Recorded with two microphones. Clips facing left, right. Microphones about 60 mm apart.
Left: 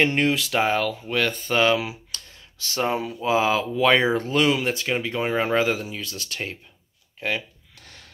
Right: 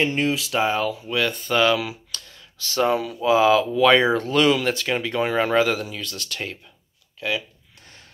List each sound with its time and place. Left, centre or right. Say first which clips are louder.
0.0 s speech: left 1 dB; left
1.5 s a sound: right 1 dB; left
2.8 s speech: right 4 dB; left
7.2 s speech: right 1 dB; left